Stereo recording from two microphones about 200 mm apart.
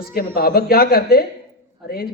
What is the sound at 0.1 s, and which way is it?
A man's voice, 45° left (ahead or behind).